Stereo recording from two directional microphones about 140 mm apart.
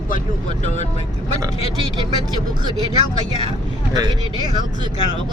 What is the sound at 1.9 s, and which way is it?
Speech, 30° right (ahead or behind).